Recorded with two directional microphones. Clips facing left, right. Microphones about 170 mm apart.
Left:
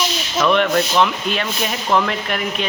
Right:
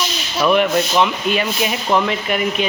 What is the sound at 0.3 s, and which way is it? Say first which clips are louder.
Speech: right 1 dB; 5° right (ahead or behind).